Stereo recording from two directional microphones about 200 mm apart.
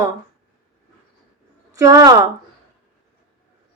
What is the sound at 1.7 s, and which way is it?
Speech, 15° right (ahead or behind).